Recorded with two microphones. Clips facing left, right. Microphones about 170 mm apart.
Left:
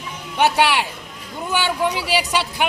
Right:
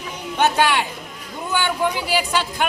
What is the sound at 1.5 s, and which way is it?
A woman's voice, 15° left (ahead or behind).